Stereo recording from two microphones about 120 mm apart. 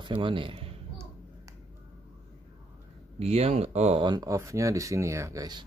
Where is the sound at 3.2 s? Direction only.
60° right (ahead or behind).